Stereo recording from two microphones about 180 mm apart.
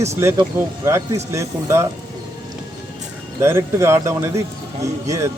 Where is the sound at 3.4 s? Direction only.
15° right (ahead or behind).